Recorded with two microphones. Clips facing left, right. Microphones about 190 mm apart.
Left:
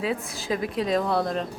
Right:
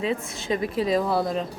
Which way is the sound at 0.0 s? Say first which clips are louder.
Right 1 dB; centre (ahead or behind).